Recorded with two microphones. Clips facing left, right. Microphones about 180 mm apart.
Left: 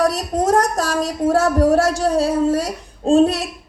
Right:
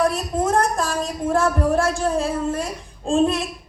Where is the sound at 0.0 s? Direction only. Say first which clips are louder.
Left 3 dB; 40° left (ahead or behind).